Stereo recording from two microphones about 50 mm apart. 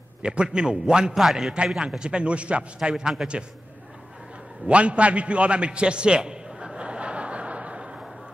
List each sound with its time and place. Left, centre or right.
0.2 s a man's voice: centre
1.2 s a man's voice: centre
2.0 s a man's voice: right
4.6 s a sound: right